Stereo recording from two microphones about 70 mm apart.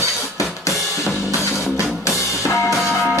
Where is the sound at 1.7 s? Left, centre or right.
Left.